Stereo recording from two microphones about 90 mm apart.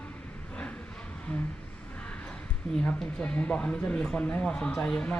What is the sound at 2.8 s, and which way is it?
Speech, 10° left (ahead or behind).